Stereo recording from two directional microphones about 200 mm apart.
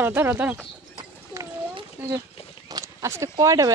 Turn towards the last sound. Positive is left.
turn(degrees=-15)  # may be behind; listen again after turning